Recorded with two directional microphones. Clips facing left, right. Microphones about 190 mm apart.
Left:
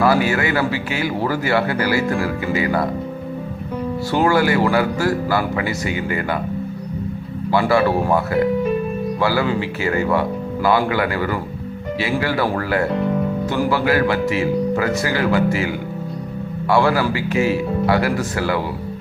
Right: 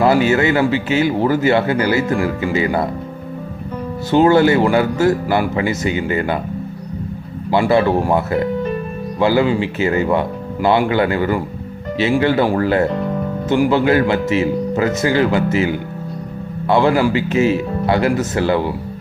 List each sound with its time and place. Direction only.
0.0 s a man's voice: 25° right (ahead or behind)
4.1 s a man's voice: 25° right (ahead or behind)
7.5 s a man's voice: 20° right (ahead or behind)